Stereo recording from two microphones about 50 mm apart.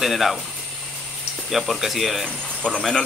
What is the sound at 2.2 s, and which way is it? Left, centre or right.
Speech, centre.